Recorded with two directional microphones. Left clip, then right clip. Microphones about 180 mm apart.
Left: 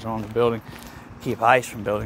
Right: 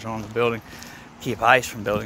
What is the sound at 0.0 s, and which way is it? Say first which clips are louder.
Speech: left 1 dB; 15° left (ahead or behind).